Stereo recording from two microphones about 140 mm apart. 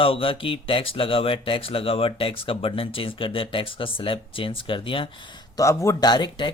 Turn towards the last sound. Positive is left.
turn(degrees=35)  # may be behind; listen again after turning